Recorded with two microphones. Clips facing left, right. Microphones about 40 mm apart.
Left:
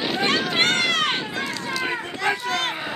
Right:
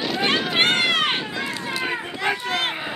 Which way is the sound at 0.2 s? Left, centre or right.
Centre.